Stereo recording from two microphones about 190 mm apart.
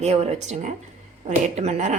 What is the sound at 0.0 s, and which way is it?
Speech, 35° right (ahead or behind).